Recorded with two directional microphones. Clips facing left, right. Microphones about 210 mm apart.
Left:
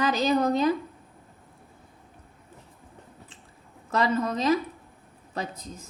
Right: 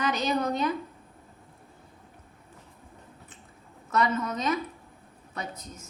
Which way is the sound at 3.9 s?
30° left (ahead or behind).